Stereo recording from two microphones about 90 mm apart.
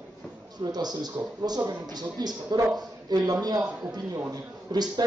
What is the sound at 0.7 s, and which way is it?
Speech, 50° right (ahead or behind).